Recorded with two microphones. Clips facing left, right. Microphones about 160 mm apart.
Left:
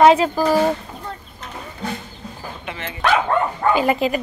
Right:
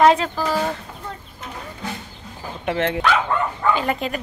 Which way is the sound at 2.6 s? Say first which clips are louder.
Right 13 dB; 65° right (ahead or behind).